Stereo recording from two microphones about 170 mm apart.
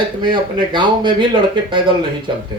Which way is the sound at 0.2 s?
25° right (ahead or behind).